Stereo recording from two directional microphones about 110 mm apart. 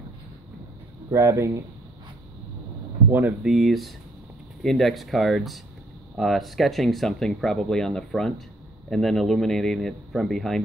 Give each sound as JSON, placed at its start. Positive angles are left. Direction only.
{"t": 1.1, "sound": "speech", "side_deg": -25}
{"t": 3.1, "sound": "speech", "side_deg": -15}
{"t": 3.4, "sound": "speech", "side_deg": 0}